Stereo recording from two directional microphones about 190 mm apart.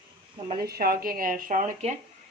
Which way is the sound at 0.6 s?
50° right (ahead or behind).